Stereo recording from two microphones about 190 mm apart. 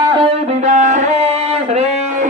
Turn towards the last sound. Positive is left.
turn(degrees=-35)  # may be behind; listen again after turning